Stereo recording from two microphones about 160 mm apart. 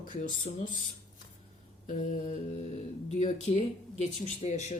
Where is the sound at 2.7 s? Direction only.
40° left (ahead or behind).